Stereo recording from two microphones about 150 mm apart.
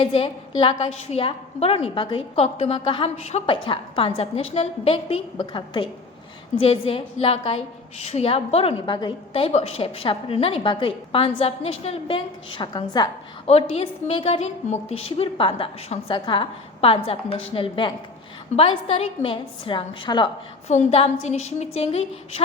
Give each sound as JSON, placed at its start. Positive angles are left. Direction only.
{"t": 0.0, "sound": "a woman's voice", "side_deg": 35}
{"t": 13.5, "sound": "a woman's voice", "side_deg": 45}
{"t": 20.7, "sound": "a woman's voice", "side_deg": 45}